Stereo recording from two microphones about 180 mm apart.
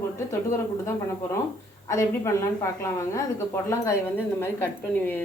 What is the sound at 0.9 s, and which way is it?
A woman's voice, 15° left (ahead or behind).